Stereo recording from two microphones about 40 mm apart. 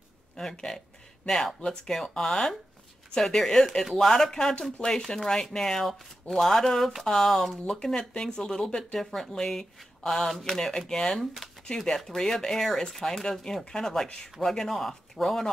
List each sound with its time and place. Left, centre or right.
0.4 s speech: centre
7.6 s speech: centre
14.0 s speech: left
14.4 s speech: centre